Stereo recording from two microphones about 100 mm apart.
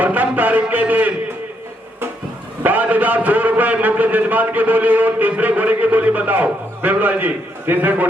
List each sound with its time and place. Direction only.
0.0 s a man's voice: 15° right (ahead or behind)
2.6 s a man's voice: 15° right (ahead or behind)